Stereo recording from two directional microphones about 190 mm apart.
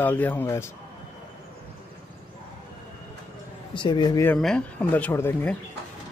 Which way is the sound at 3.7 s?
25° left (ahead or behind).